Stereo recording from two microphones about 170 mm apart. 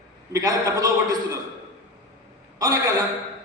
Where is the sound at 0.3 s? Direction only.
20° right (ahead or behind).